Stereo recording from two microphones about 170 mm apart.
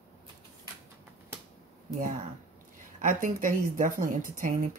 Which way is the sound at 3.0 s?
55° right (ahead or behind).